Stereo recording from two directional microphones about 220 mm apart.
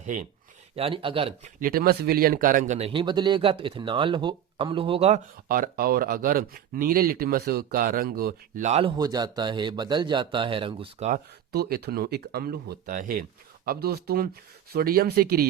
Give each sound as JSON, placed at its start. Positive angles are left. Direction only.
{"t": 0.0, "sound": "speech", "side_deg": -35}
{"t": 0.8, "sound": "speech", "side_deg": -25}
{"t": 1.5, "sound": "speech", "side_deg": -40}
{"t": 5.5, "sound": "speech", "side_deg": -40}
{"t": 9.0, "sound": "speech", "side_deg": -20}
{"t": 11.1, "sound": "speech", "side_deg": -45}